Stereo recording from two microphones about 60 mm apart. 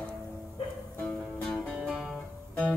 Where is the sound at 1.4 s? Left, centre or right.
Centre.